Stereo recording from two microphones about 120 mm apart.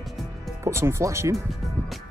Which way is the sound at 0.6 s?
20° right (ahead or behind).